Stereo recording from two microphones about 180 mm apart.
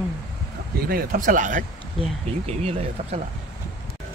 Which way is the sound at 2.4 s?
35° right (ahead or behind).